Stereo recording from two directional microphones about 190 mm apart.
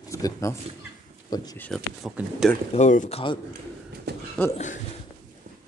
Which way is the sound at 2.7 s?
40° left (ahead or behind).